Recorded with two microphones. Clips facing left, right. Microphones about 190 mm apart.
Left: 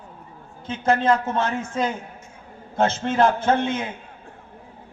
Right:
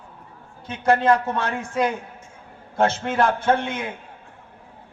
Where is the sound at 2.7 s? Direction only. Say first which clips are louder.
Even; 20° left (ahead or behind).